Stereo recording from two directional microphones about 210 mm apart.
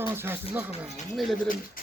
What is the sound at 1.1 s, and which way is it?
Speech, centre (ahead or behind).